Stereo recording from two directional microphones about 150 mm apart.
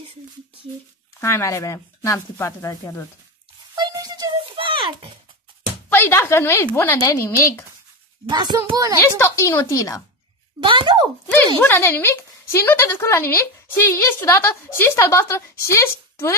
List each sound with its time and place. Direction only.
1.2 s speech: 20° left (ahead or behind)
3.7 s music: 25° right (ahead or behind)
4.4 s a sound: 35° right (ahead or behind)
5.9 s a woman's voice: 15° left (ahead or behind)
8.3 s a child's voice: 25° right (ahead or behind)
9.2 s speech: 20° left (ahead or behind)
10.6 s speech: 35° right (ahead or behind)
11.2 s a woman's voice: 15° left (ahead or behind)